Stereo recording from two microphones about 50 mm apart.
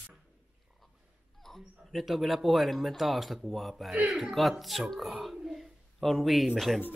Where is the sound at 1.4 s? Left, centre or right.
Centre.